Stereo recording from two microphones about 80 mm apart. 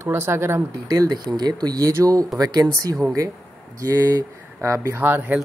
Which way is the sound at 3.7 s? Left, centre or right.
Right.